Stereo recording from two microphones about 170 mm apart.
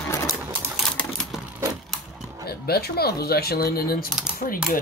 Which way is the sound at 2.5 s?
65° left (ahead or behind).